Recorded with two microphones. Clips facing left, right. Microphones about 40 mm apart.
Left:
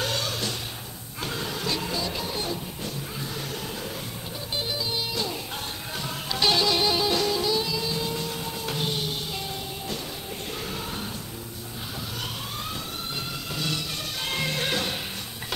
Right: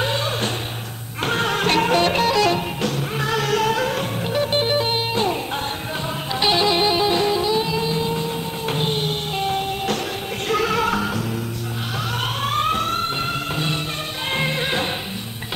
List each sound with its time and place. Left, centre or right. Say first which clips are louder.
0.0 s music: right 6 dB; right
1.2 s music: right 10 dB; right
4.6 s music: right 5 dB; right
6.3 s music: right 4 dB; right
10.5 s music: right 17 dB; right
12.4 s music: right 14 dB; right
14.3 s music: right 6 dB; right